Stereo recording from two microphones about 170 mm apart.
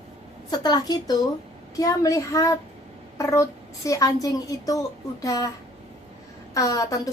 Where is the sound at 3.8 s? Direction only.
20° left (ahead or behind).